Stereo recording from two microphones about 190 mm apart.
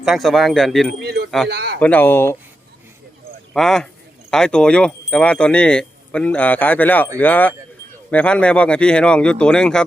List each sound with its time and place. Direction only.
0.0 s speech: centre (ahead or behind)
0.9 s speech: 60° right (ahead or behind)
1.8 s speech: 10° left (ahead or behind)
3.5 s speech: 5° left (ahead or behind)